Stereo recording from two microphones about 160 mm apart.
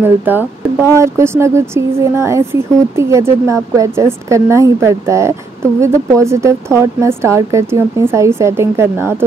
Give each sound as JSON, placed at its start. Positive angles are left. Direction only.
{"t": 0.0, "sound": "speech", "side_deg": -10}